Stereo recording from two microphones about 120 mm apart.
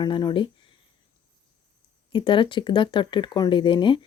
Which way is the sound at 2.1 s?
45° left (ahead or behind).